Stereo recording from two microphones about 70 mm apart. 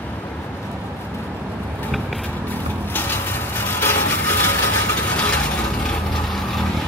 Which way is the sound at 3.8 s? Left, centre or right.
Left.